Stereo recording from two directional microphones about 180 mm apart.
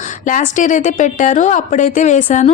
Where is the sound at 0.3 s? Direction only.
45° left (ahead or behind).